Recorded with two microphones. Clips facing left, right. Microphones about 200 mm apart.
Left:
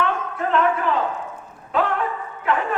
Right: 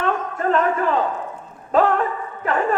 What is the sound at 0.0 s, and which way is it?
Music, 40° right (ahead or behind).